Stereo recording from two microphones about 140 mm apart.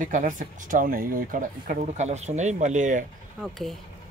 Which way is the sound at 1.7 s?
55° right (ahead or behind).